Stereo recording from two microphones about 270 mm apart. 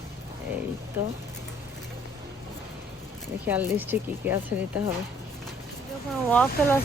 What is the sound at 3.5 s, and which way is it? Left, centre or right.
Speech, centre.